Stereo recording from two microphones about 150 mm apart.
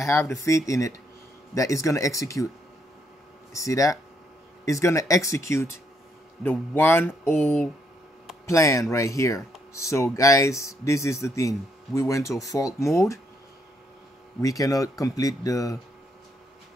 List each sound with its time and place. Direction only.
0.0 s speech: 20° left (ahead or behind)
3.5 s speech: 20° left (ahead or behind)
14.4 s speech: 25° left (ahead or behind)